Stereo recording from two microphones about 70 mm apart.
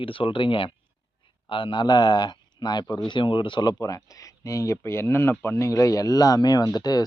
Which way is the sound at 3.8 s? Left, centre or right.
Left.